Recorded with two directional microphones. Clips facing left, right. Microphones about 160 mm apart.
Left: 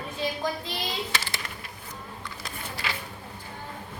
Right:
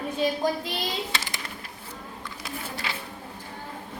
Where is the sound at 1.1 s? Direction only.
20° right (ahead or behind).